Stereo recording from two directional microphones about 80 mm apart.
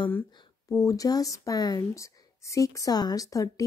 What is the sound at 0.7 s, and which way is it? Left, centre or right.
Speech, left.